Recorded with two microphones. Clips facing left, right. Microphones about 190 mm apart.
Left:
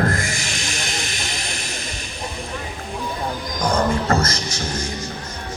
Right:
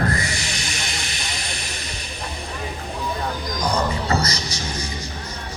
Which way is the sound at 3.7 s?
50° left (ahead or behind).